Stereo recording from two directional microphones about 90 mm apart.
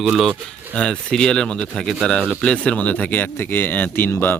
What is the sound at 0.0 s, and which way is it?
Speech, centre (ahead or behind).